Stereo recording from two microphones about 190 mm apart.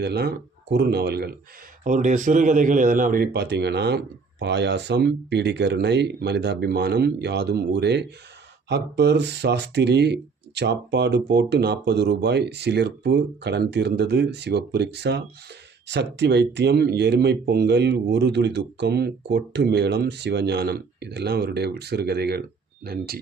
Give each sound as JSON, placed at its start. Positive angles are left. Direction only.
{"t": 0.0, "sound": "speech", "side_deg": -60}
{"t": 1.8, "sound": "speech", "side_deg": -40}